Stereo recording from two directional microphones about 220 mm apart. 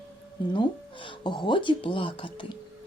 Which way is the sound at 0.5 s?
20° left (ahead or behind).